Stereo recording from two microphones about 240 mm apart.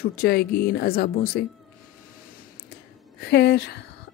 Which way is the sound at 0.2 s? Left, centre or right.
Left.